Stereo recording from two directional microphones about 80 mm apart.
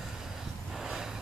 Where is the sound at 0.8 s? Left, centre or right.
Centre.